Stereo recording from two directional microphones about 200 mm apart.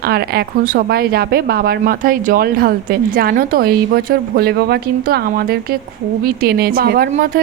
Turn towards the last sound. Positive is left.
turn(degrees=-50)  # may be behind; listen again after turning